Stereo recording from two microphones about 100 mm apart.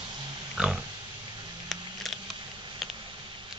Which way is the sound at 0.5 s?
10° right (ahead or behind).